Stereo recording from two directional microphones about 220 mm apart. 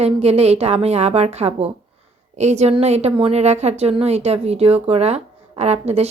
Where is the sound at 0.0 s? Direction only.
30° right (ahead or behind).